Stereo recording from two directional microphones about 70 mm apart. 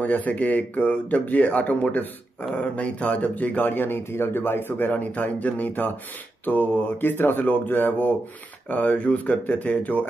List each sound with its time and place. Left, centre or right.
0.0 s speech: left